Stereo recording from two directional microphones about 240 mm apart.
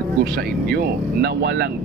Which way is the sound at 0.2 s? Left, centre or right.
Right.